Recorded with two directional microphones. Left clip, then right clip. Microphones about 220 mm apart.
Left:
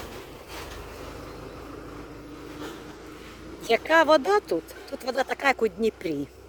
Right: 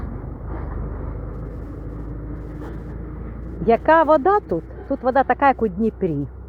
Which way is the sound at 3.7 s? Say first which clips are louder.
Right 5 dB; 10° left (ahead or behind).